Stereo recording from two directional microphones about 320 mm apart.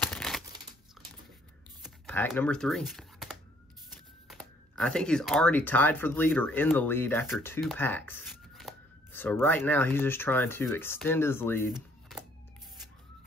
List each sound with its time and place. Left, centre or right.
0.0 s crumpling: centre
1.8 s computer keyboard: centre
3.9 s speech: centre